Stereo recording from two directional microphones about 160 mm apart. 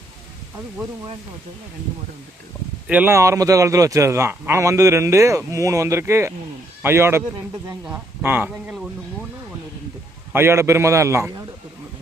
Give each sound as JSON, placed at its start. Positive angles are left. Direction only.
{"t": 2.8, "sound": "a man's voice", "side_deg": -10}
{"t": 10.3, "sound": "a man's voice", "side_deg": -15}